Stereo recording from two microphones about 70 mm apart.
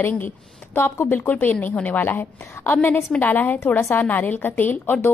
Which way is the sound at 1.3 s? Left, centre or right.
Left.